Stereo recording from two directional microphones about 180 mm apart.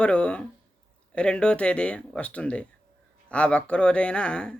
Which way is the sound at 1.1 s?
5° left (ahead or behind).